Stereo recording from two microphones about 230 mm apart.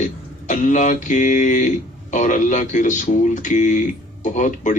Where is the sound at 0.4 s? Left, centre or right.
Left.